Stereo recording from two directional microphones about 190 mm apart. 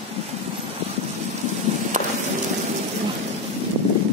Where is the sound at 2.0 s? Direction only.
40° right (ahead or behind).